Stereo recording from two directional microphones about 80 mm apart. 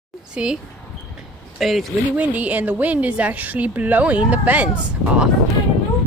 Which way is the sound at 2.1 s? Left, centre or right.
Centre.